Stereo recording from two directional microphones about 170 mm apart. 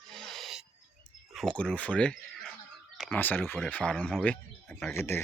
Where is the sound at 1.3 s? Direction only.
5° left (ahead or behind).